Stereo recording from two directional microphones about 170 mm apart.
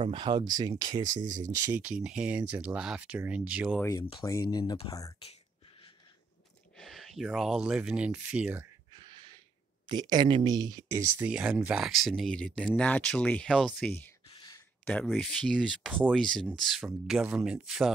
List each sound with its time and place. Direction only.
0.0 s speech: 30° right (ahead or behind)
1.0 s speech: 50° right (ahead or behind)
1.7 s speech: 10° right (ahead or behind)
3.7 s speech: 15° left (ahead or behind)
5.2 s a sound: 35° left (ahead or behind)
6.8 s speech: centre (ahead or behind)
8.9 s a sound: 30° right (ahead or behind)
9.8 s speech: 25° right (ahead or behind)
11.1 s speech: 5° right (ahead or behind)